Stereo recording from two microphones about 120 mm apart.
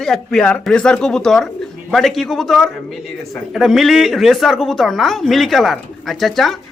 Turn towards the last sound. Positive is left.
turn(degrees=0)  # may be behind; listen again after turning